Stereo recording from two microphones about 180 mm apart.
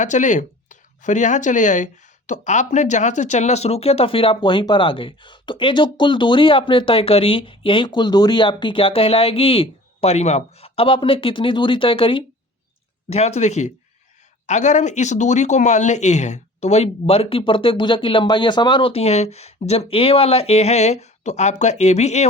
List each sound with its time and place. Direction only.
0.0 s speech: 45° left (ahead or behind)